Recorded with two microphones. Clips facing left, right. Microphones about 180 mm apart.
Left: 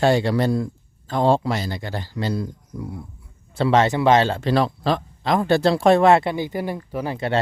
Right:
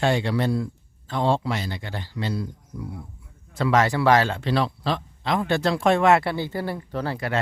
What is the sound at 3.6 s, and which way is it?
Speech, 30° left (ahead or behind).